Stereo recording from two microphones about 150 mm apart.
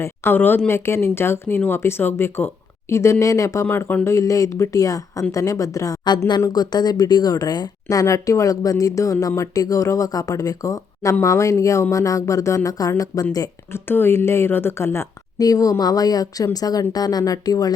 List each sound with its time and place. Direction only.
0.0 s speech: 15° left (ahead or behind)